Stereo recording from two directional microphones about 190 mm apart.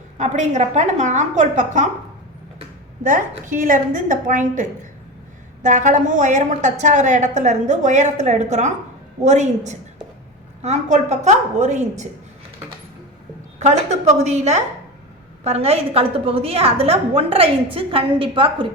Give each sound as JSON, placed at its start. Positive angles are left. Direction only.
{"t": 0.2, "sound": "a woman's voice", "side_deg": -40}
{"t": 3.0, "sound": "a woman's voice", "side_deg": -45}
{"t": 13.6, "sound": "a woman's voice", "side_deg": -35}